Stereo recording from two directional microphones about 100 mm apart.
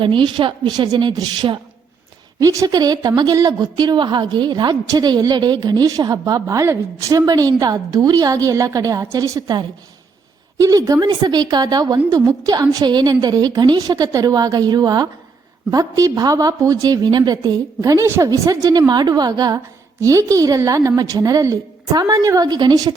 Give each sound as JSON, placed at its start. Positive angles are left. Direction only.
{"t": 0.0, "sound": "a woman's voice", "side_deg": -55}
{"t": 2.4, "sound": "a woman's voice", "side_deg": -35}
{"t": 10.6, "sound": "a woman's voice", "side_deg": -35}